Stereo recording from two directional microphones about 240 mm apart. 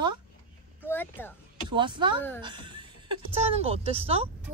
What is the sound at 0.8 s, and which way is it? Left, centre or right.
Speech, centre.